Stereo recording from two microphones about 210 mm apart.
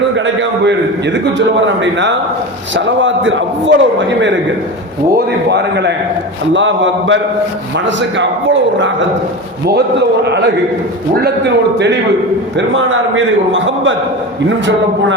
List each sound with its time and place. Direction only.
1.6 s a man's voice: 60° right (ahead or behind)
5.1 s a man's voice: 55° right (ahead or behind)
12.5 s a man's voice: 65° right (ahead or behind)